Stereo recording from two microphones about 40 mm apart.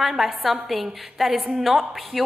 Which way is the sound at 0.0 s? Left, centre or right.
Centre.